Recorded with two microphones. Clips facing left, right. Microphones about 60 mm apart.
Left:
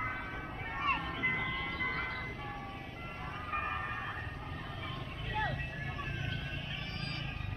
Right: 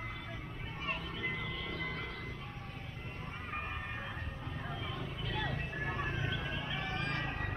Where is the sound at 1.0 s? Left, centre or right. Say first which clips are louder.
Left 4 dB; left.